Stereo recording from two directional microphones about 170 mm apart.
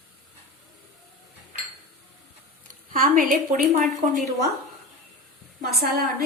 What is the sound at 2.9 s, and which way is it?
A woman's voice, 55° right (ahead or behind).